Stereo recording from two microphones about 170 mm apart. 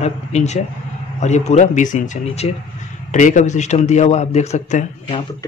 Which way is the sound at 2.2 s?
35° left (ahead or behind).